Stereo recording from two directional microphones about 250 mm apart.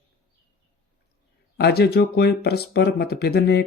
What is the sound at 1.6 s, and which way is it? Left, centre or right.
Speech, left.